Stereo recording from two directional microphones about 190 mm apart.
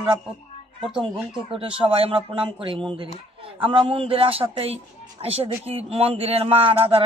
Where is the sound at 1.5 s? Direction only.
30° right (ahead or behind).